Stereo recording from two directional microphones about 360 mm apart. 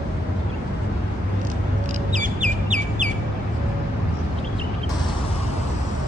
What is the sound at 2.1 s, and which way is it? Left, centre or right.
Bird, centre.